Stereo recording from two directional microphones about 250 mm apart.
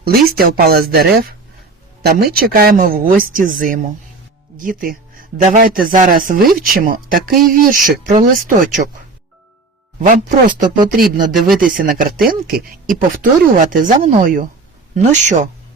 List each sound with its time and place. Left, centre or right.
0.0 s speech: right
10.0 s speech: right
11.3 s speech: centre
11.7 s speech: right